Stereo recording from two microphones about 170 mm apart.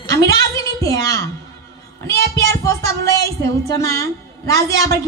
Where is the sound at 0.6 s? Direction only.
20° left (ahead or behind).